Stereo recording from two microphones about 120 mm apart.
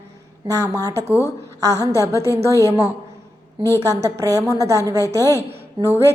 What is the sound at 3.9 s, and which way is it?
A woman's voice, 30° right (ahead or behind).